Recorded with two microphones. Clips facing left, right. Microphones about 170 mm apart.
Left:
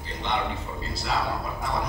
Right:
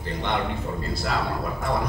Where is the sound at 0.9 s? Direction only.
55° right (ahead or behind).